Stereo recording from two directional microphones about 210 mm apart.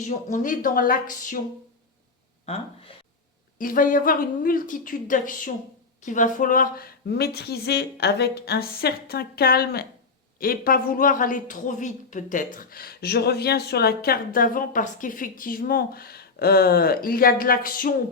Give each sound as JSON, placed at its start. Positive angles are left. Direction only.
{"t": 0.0, "sound": "a woman's voice", "side_deg": 35}
{"t": 3.6, "sound": "a woman's voice", "side_deg": 40}